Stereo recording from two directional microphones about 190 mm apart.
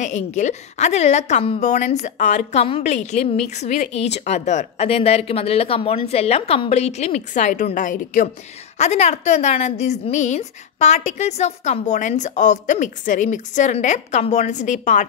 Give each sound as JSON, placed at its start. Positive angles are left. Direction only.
{"t": 0.0, "sound": "a woman's voice", "side_deg": 40}